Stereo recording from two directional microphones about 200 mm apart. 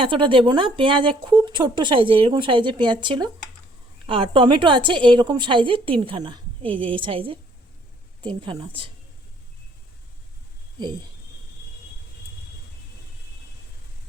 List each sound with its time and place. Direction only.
0.0 s speech: 25° right (ahead or behind)